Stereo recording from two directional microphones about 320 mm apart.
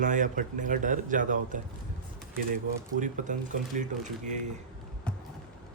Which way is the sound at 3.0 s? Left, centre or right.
Right.